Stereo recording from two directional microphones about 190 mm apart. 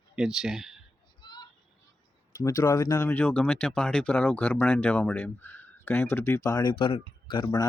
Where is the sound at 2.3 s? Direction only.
15° left (ahead or behind).